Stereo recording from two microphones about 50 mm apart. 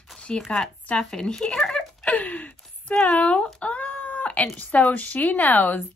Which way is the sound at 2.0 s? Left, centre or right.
Left.